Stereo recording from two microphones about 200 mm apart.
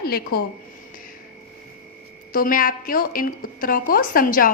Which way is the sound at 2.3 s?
45° left (ahead or behind).